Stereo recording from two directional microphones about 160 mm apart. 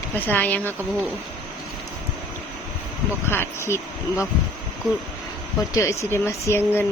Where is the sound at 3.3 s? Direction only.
15° left (ahead or behind).